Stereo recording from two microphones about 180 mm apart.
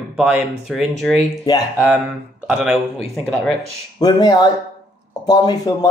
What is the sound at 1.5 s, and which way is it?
Speech, 25° left (ahead or behind).